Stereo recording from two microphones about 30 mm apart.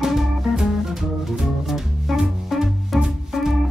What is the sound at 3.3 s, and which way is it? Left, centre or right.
Music, centre.